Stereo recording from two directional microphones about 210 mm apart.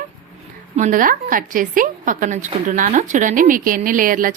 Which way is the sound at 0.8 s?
40° right (ahead or behind).